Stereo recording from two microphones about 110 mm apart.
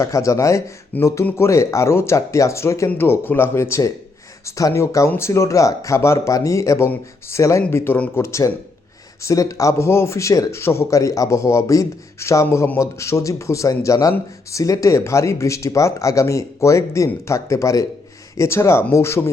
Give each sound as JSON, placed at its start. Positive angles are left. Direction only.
{"t": 0.0, "sound": "speech", "side_deg": 30}
{"t": 7.9, "sound": "speech", "side_deg": 10}
{"t": 8.2, "sound": "speech", "side_deg": 25}